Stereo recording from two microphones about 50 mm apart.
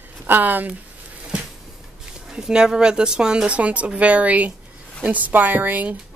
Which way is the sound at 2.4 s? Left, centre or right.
Centre.